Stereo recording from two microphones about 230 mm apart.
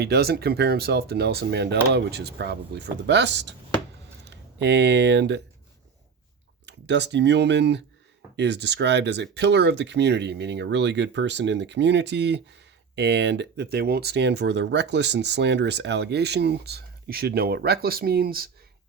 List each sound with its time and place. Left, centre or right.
0.0 s speech: right
6.7 s speech: right